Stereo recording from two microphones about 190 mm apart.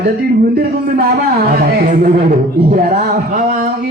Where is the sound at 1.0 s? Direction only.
50° right (ahead or behind).